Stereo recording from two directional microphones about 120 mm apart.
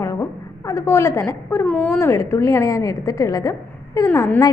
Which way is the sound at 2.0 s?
25° left (ahead or behind).